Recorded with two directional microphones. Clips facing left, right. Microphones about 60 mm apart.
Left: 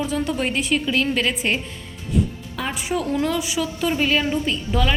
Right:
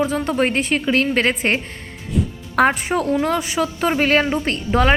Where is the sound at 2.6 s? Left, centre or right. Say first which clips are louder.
Right 8 dB; right.